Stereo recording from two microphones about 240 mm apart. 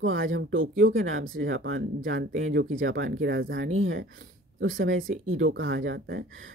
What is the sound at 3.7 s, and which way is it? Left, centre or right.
Speech, right.